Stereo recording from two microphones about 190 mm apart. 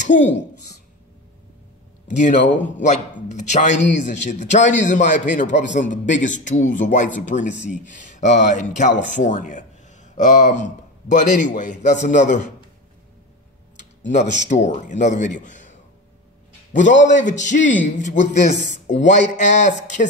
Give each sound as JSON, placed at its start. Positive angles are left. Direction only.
{"t": 0.0, "sound": "speech", "side_deg": 40}
{"t": 2.0, "sound": "a man's voice", "side_deg": 40}
{"t": 2.4, "sound": "a man's voice", "side_deg": 75}
{"t": 2.8, "sound": "a man's voice", "side_deg": 35}
{"t": 14.1, "sound": "a man's voice", "side_deg": 40}
{"t": 15.4, "sound": "a sound", "side_deg": 40}
{"t": 17.0, "sound": "a man's voice", "side_deg": 40}